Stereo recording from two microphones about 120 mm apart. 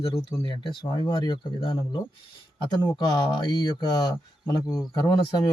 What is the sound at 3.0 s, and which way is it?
Speech, 35° left (ahead or behind).